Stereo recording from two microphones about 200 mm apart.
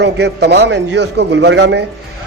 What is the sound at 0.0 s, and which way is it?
A man's voice, 55° right (ahead or behind).